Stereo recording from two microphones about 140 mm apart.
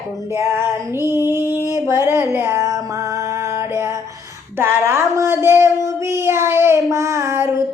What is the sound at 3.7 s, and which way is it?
Speech, 20° right (ahead or behind).